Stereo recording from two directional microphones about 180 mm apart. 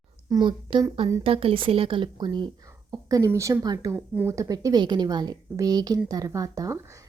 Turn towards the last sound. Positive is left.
turn(degrees=-20)  # may be behind; listen again after turning